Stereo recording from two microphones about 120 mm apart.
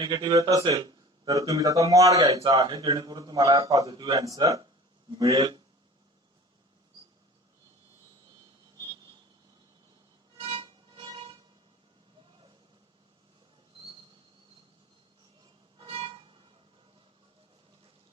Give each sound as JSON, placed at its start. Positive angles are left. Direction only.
{"t": 0.0, "sound": "speech", "side_deg": -40}
{"t": 10.3, "sound": "music", "side_deg": -45}
{"t": 15.8, "sound": "music", "side_deg": -45}